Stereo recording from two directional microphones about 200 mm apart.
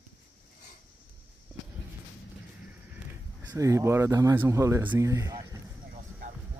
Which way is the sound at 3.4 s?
15° right (ahead or behind).